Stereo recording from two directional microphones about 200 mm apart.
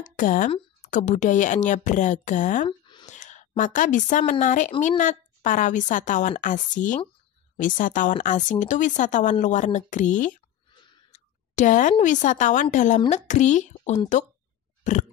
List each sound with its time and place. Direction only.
0.0 s a woman's voice: 40° left (ahead or behind)
3.1 s a sound: 35° left (ahead or behind)
4.2 s a woman's voice: 40° left (ahead or behind)
10.7 s a sound: 35° left (ahead or behind)
12.0 s a woman's voice: 40° left (ahead or behind)
14.8 s pig: 35° left (ahead or behind)